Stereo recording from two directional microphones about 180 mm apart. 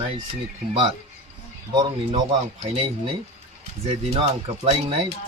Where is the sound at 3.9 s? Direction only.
30° right (ahead or behind).